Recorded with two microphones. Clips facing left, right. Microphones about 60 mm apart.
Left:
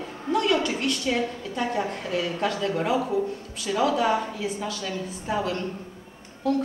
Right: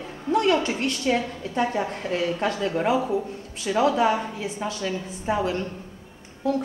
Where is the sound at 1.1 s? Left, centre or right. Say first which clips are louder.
Right 2 dB; right.